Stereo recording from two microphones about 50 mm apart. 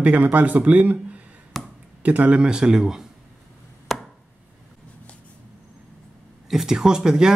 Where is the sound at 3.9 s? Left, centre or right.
Centre.